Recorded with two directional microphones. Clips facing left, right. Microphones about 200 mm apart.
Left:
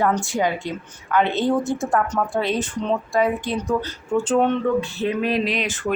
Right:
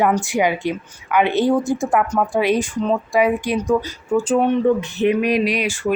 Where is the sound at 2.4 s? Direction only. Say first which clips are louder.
Right 7 dB; 10° right (ahead or behind).